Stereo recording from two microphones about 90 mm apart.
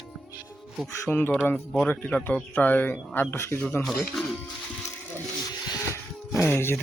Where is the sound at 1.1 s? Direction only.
20° left (ahead or behind).